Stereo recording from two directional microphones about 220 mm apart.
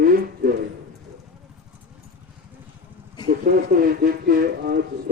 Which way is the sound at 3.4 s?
40° right (ahead or behind).